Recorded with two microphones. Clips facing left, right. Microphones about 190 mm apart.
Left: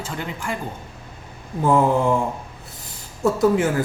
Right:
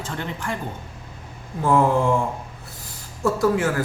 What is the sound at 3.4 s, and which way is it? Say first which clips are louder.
Speech: left 2 dB; 20° left (ahead or behind).